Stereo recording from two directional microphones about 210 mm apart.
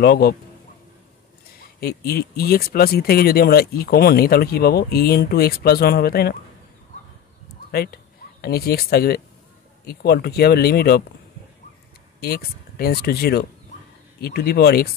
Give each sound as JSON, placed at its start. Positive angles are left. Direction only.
{"t": 0.0, "sound": "speech", "side_deg": 50}
{"t": 1.6, "sound": "speech", "side_deg": 45}
{"t": 7.7, "sound": "speech", "side_deg": 45}
{"t": 12.2, "sound": "speech", "side_deg": 45}